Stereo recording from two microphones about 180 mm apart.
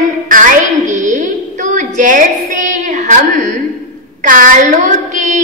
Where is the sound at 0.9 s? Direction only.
45° right (ahead or behind).